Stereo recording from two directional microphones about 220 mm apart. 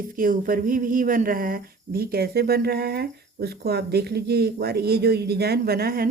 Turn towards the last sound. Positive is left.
turn(degrees=-45)  # may be behind; listen again after turning